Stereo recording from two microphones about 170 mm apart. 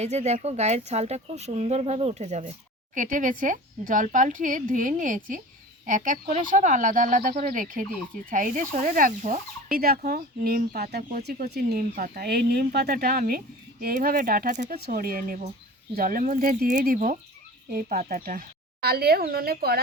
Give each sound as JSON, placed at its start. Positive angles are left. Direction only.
{"t": 0.0, "sound": "speech", "side_deg": -40}
{"t": 14.7, "sound": "speech", "side_deg": -60}